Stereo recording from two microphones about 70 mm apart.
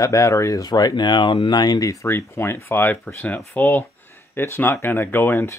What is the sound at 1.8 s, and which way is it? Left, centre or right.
Speech, left.